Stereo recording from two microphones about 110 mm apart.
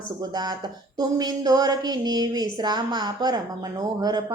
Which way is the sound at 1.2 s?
35° right (ahead or behind).